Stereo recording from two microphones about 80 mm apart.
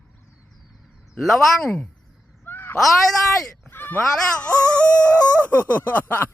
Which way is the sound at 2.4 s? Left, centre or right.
Left.